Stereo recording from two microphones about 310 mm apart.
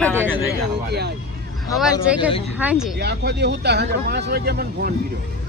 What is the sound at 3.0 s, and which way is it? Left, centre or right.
Speech, right.